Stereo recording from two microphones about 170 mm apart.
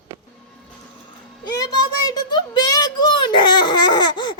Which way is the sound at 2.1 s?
25° left (ahead or behind).